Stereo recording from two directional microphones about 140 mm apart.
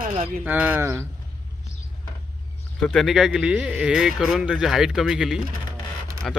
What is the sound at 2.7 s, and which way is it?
Speech, 5° left (ahead or behind).